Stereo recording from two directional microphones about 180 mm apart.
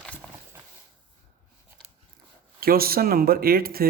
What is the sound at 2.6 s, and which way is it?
Speech, 55° right (ahead or behind).